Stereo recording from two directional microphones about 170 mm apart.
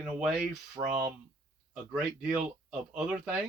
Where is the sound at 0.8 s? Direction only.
45° right (ahead or behind).